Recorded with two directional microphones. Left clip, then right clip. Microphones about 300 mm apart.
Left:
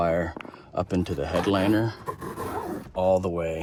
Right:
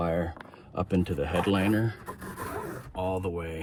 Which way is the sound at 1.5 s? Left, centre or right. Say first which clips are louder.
Left 6 dB; left.